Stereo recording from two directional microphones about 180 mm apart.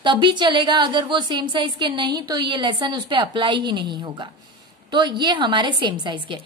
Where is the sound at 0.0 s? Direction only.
25° right (ahead or behind).